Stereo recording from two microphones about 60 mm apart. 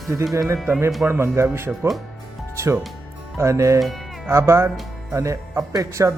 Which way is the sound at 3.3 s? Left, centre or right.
Right.